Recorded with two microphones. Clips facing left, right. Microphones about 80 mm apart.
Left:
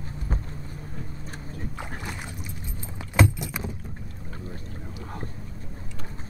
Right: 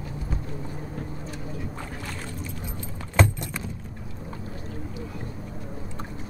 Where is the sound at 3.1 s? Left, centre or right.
Centre.